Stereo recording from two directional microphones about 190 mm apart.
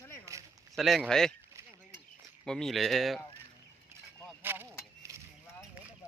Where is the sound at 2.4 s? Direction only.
Centre (ahead or behind).